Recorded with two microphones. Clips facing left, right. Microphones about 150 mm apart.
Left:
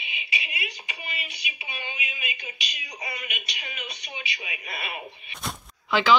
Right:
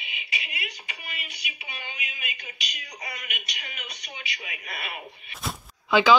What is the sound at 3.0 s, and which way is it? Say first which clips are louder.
A man's voice: left 3 dB; 5° left (ahead or behind).